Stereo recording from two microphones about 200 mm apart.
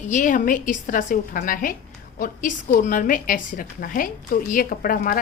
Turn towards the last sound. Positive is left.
turn(degrees=45)  # may be behind; listen again after turning